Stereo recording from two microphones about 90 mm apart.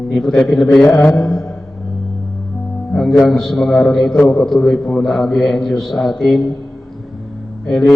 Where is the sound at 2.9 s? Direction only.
5° left (ahead or behind).